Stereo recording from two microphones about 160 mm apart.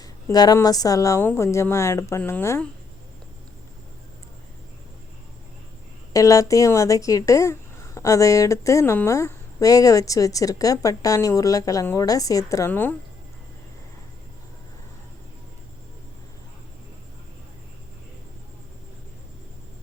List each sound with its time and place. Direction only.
0.0 s a woman's voice: 25° left (ahead or behind)
6.1 s a woman's voice: 20° left (ahead or behind)